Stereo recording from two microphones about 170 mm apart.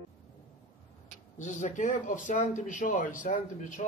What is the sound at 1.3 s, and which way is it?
Speech, 45° left (ahead or behind).